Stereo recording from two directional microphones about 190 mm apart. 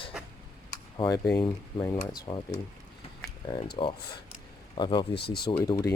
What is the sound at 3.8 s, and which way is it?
Speech, 30° left (ahead or behind).